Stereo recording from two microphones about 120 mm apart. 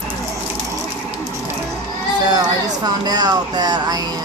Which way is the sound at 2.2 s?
35° right (ahead or behind).